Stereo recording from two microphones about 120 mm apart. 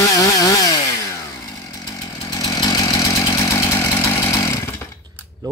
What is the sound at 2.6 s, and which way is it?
Vehicle, 35° left (ahead or behind).